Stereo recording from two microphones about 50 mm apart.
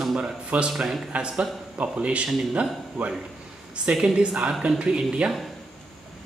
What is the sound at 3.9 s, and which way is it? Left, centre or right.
Speech, centre.